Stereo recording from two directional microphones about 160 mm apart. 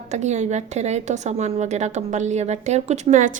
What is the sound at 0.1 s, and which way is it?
A woman's voice, 45° right (ahead or behind).